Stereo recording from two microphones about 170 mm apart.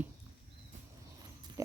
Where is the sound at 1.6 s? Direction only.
20° right (ahead or behind).